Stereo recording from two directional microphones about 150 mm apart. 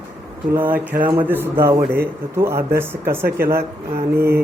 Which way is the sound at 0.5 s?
15° right (ahead or behind).